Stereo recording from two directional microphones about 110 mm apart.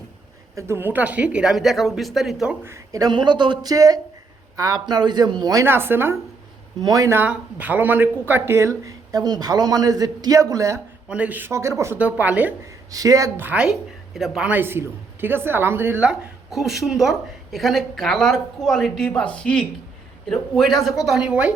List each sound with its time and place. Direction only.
0.5 s a woman's voice: 20° right (ahead or behind); by 2.6 s 5° right (ahead or behind)
2.6 s a man's voice: 30° right (ahead or behind)
5.6 s speech: 20° right (ahead or behind)
6.8 s a man's voice: 35° right (ahead or behind)
7.1 s a woman's voice: 15° right (ahead or behind)
8.8 s a man's voice: 35° right (ahead or behind)
11.1 s speech: 15° right (ahead or behind)
11.9 s a woman's voice: 15° right (ahead or behind)
12.6 s speech: 30° right (ahead or behind)
13.4 s a woman's voice: 10° right (ahead or behind)
14.5 s a woman's voice: 20° right (ahead or behind)